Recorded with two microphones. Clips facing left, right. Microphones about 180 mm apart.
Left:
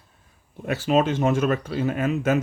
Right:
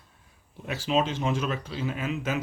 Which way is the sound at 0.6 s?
50° left (ahead or behind).